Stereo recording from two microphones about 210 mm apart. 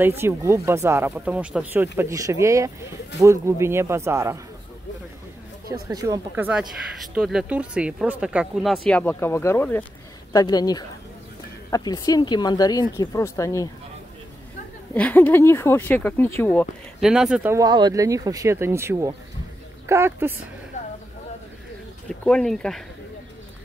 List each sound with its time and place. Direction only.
0.0 s speech: 10° right (ahead or behind)
5.7 s a woman's voice: 15° right (ahead or behind); by 13.7 s 15° left (ahead or behind)
15.0 s a woman's voice: 10° left (ahead or behind); by 20.3 s 10° right (ahead or behind)
22.2 s speech: centre (ahead or behind)